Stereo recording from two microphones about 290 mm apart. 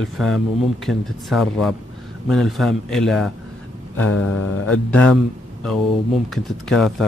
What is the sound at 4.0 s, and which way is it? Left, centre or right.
Speech, left.